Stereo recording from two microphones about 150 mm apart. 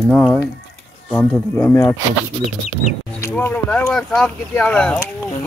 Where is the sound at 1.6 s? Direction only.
15° left (ahead or behind).